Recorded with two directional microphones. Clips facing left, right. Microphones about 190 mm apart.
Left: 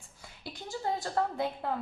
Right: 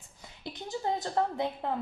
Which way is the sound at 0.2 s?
20° right (ahead or behind).